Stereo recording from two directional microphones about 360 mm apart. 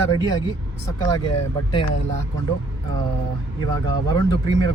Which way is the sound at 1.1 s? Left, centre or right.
Centre.